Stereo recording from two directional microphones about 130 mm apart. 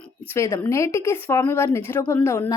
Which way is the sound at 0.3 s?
25° left (ahead or behind).